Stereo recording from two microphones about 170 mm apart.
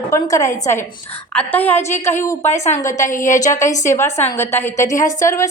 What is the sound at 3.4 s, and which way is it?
A woman's voice, 15° left (ahead or behind).